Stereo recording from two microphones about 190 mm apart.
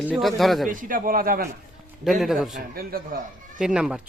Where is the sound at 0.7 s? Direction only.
45° right (ahead or behind).